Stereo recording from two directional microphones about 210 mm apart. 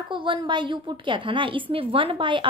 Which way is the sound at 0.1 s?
20° right (ahead or behind).